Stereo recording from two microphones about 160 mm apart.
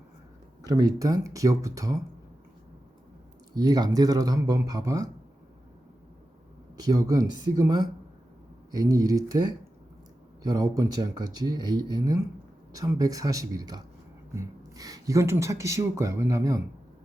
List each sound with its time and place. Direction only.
0.6 s speech: 25° right (ahead or behind)
3.5 s speech: 25° right (ahead or behind)
6.7 s speech: 25° right (ahead or behind)
10.4 s speech: 20° right (ahead or behind)